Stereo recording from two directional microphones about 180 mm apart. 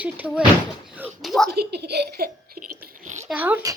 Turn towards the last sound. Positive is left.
turn(degrees=-10)  # may be behind; listen again after turning